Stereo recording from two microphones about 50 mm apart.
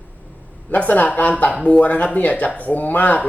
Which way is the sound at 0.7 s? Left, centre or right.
Left.